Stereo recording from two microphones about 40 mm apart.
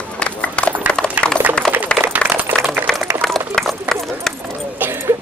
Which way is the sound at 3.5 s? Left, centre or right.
Right.